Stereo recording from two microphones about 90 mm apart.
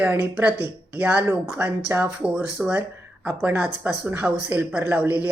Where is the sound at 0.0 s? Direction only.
20° right (ahead or behind).